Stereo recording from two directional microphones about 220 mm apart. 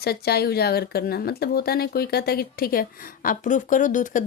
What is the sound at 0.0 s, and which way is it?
A woman's voice, 45° left (ahead or behind).